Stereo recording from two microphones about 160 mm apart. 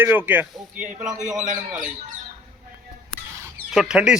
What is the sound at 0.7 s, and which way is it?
A man's voice, 55° right (ahead or behind).